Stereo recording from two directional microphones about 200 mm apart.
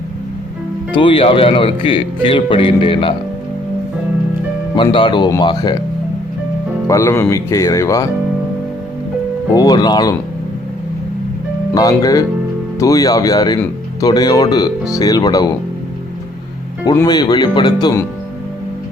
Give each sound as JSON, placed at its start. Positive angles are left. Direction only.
{"t": 0.9, "sound": "speech", "side_deg": 25}
{"t": 4.7, "sound": "speech", "side_deg": 25}
{"t": 6.8, "sound": "speech", "side_deg": 15}
{"t": 9.6, "sound": "speech", "side_deg": 20}
{"t": 11.7, "sound": "speech", "side_deg": 15}
{"t": 16.8, "sound": "speech", "side_deg": 20}